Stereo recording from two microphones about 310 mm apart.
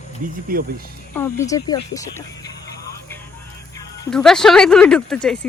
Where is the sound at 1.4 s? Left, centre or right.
Centre.